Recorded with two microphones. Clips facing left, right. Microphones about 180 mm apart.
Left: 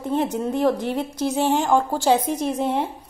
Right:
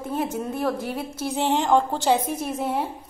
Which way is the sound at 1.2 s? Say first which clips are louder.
Left 2 dB; 15° left (ahead or behind).